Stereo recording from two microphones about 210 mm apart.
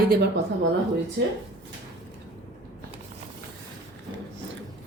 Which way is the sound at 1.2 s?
55° right (ahead or behind).